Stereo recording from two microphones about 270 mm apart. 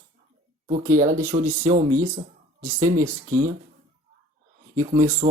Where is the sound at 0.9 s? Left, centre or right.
Right.